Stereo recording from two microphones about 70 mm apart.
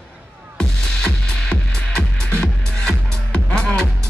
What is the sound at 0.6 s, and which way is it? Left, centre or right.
Music, centre.